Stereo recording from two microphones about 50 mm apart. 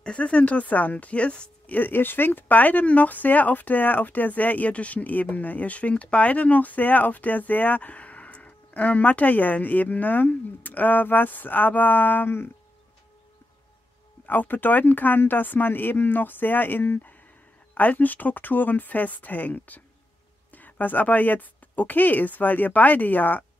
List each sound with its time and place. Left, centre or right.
0.0 s speech: left
1.8 s speech: left
14.2 s speech: left